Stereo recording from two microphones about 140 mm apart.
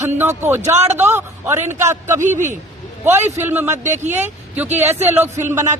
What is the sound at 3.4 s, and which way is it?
Speech, 15° right (ahead or behind).